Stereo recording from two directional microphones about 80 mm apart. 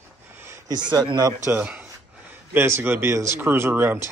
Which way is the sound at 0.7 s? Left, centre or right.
Right.